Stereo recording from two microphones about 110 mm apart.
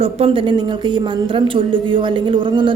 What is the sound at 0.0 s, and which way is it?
Speech, 70° right (ahead or behind).